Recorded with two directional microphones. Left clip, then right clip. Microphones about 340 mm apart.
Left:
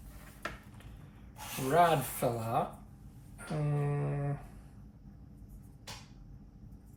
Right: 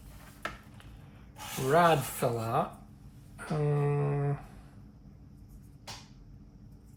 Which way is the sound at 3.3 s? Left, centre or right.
Right.